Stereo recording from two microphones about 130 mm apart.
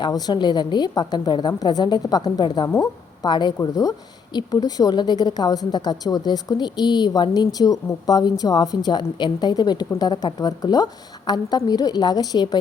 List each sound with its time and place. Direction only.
0.0 s a woman's voice: 35° left (ahead or behind)